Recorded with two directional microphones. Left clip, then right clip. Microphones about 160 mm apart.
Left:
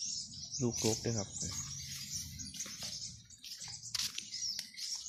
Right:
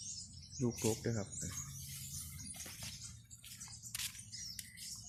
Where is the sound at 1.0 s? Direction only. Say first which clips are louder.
Left 3 dB; 10° left (ahead or behind).